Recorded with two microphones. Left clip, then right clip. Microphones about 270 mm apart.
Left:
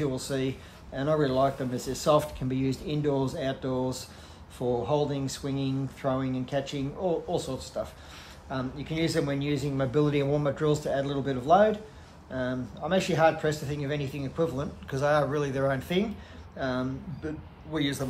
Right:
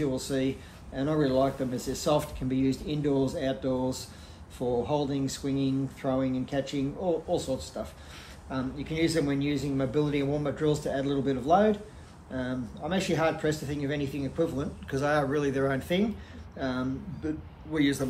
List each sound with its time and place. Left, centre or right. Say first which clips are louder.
0.0 s speech: right 1 dB; left